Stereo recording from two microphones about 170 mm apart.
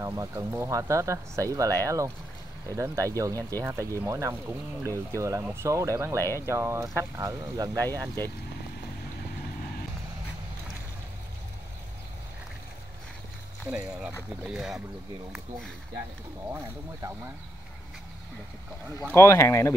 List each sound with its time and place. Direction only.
0.0 s speech: 20° right (ahead or behind)
6.2 s speech: 15° left (ahead or behind)
6.5 s speech: 15° right (ahead or behind)
13.7 s a sound: 5° right (ahead or behind)
14.4 s speech: 5° right (ahead or behind)
16.4 s speech: 15° right (ahead or behind)
19.1 s speech: 15° left (ahead or behind)